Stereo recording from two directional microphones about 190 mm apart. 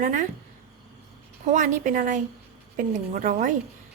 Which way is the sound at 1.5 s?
40° right (ahead or behind).